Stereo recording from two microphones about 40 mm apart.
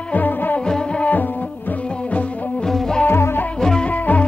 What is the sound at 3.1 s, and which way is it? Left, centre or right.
Music, left.